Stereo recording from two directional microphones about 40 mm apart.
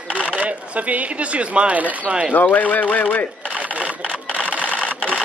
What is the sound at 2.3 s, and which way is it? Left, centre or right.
Speech, left.